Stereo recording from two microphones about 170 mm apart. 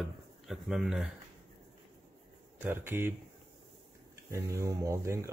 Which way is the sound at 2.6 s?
10° right (ahead or behind).